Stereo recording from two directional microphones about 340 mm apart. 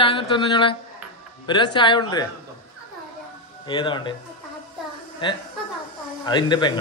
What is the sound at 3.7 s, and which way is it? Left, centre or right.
Speech, centre.